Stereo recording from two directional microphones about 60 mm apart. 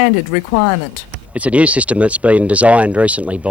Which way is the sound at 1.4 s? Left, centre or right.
Right.